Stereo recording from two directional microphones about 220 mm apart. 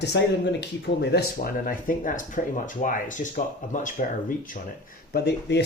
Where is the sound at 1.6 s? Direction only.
40° left (ahead or behind).